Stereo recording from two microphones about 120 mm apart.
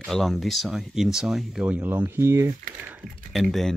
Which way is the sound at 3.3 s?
Centre (ahead or behind).